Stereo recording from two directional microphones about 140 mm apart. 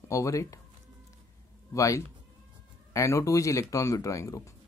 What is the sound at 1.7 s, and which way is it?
Speech, 20° left (ahead or behind).